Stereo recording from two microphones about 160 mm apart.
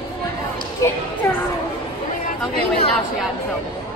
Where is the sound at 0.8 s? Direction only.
20° left (ahead or behind).